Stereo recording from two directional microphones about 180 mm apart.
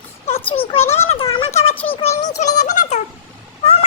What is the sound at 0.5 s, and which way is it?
Speech, 30° left (ahead or behind).